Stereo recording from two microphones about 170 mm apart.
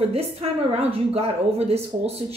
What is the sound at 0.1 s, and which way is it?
A woman's voice, 35° right (ahead or behind).